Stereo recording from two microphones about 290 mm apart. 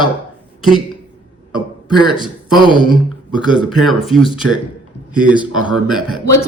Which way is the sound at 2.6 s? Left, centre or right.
Centre.